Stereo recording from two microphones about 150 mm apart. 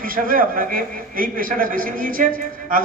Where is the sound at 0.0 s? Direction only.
70° right (ahead or behind).